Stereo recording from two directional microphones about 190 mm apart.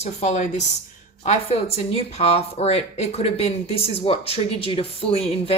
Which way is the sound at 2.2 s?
30° left (ahead or behind).